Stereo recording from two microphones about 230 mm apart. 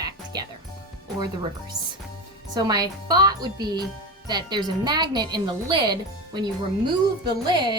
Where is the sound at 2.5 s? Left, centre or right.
Centre.